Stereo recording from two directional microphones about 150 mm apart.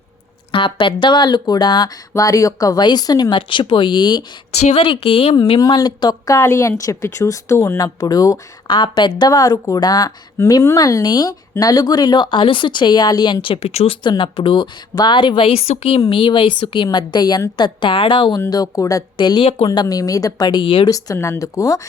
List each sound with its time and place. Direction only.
0.5 s speech: 35° left (ahead or behind)
4.6 s speech: 40° left (ahead or behind)
5.5 s speech: 25° left (ahead or behind)
20.9 s speech: 20° left (ahead or behind)